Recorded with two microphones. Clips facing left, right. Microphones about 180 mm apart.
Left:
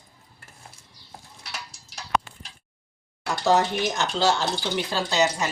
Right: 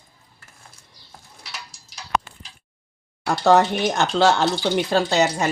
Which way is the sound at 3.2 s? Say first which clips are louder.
Right 5 dB; 60° right (ahead or behind).